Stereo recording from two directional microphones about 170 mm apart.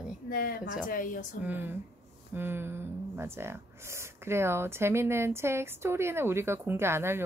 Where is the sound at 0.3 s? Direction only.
60° left (ahead or behind).